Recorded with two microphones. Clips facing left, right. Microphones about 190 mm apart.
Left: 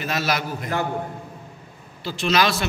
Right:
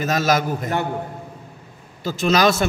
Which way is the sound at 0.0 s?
45° right (ahead or behind).